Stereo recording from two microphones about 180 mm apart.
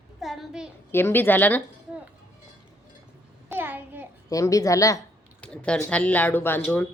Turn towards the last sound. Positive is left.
turn(degrees=10)  # may be behind; listen again after turning